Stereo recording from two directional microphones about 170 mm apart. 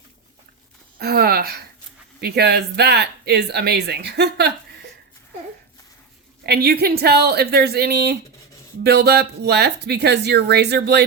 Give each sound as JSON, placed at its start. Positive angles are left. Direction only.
{"t": 0.9, "sound": "a sound", "side_deg": -65}
{"t": 2.2, "sound": "speech", "side_deg": -70}
{"t": 6.4, "sound": "speech", "side_deg": -70}